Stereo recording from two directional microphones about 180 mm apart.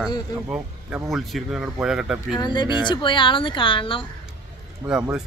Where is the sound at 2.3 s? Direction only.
25° left (ahead or behind).